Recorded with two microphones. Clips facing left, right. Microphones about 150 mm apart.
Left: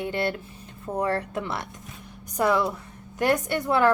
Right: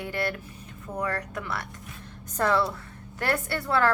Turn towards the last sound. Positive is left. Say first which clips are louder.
# left 3 dB
turn(degrees=20)  # may be behind; listen again after turning